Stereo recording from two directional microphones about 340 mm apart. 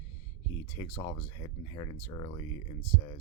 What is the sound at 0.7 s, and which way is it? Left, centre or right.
Speech, centre.